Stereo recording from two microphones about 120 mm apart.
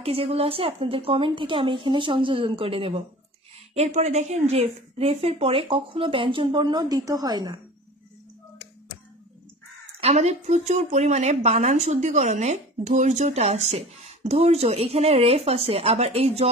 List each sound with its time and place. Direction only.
0.0 s speech: 55° right (ahead or behind)
3.7 s speech: 70° right (ahead or behind); by 7.5 s 35° right (ahead or behind)
9.9 s speech: 60° right (ahead or behind)